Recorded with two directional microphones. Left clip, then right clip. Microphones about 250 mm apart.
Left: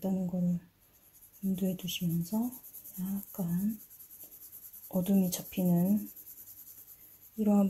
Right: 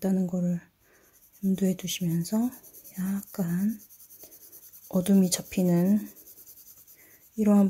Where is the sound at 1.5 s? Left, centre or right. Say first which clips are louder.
Right 6 dB; right.